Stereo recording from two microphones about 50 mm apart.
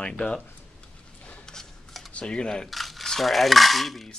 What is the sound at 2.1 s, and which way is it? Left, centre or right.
Speech, left.